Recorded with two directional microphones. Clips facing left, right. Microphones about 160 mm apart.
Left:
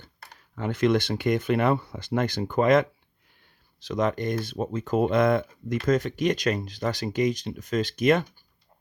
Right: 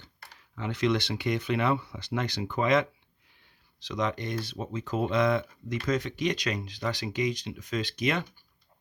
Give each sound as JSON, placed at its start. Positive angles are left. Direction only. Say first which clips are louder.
{"t": 0.5, "sound": "speech", "louder": "left 5 dB", "side_deg": 50}